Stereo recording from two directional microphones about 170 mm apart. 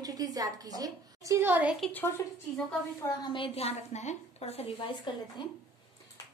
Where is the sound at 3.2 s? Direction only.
30° left (ahead or behind).